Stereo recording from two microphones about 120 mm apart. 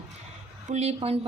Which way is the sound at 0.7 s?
65° right (ahead or behind).